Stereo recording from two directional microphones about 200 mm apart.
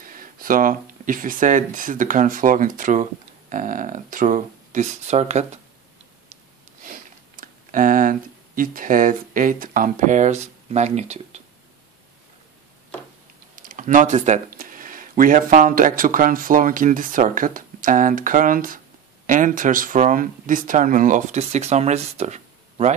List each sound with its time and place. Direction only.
0.1 s speech: 45° right (ahead or behind)
6.8 s speech: 40° right (ahead or behind)
13.6 s speech: 40° right (ahead or behind)